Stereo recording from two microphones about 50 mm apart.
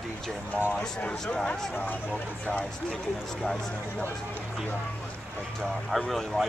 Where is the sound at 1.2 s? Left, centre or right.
Centre.